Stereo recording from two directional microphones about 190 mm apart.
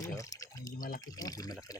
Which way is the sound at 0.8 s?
45° left (ahead or behind).